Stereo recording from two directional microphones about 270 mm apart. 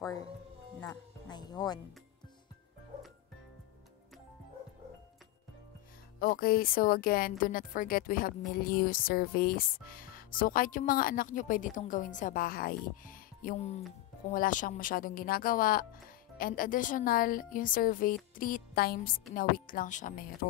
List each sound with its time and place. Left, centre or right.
0.0 s music: centre
6.1 s a woman's voice: left